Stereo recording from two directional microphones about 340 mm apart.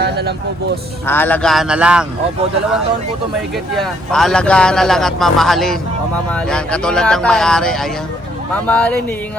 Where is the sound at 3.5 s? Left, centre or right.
Centre.